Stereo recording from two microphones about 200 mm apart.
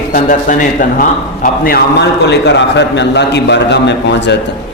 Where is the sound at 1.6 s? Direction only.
55° left (ahead or behind).